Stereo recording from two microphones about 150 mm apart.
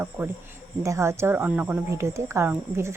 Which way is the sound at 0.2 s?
15° right (ahead or behind).